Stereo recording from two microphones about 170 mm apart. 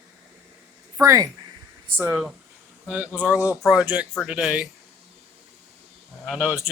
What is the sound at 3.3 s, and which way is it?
Speech, 20° left (ahead or behind).